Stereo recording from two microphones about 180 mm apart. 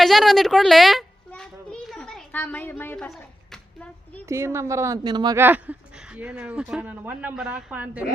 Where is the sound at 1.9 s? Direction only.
Centre (ahead or behind).